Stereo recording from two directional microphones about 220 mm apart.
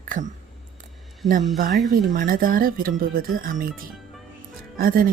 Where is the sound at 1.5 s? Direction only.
40° right (ahead or behind).